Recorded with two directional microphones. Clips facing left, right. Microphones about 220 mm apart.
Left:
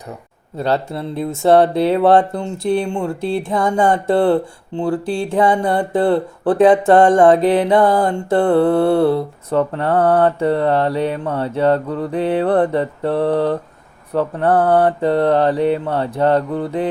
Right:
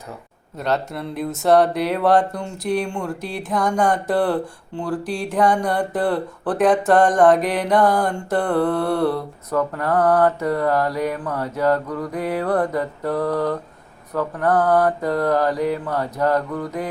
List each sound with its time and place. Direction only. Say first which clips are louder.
0.5 s speech: left 4 dB; 30° left (ahead or behind)